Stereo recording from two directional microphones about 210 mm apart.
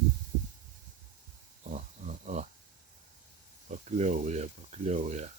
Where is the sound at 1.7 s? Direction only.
35° right (ahead or behind).